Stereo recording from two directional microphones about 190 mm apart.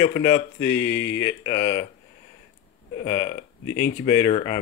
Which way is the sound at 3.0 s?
25° left (ahead or behind).